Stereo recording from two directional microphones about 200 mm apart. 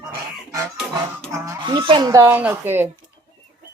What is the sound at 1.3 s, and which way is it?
Speech, 20° right (ahead or behind).